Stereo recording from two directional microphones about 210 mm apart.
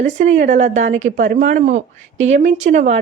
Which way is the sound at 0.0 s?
35° right (ahead or behind).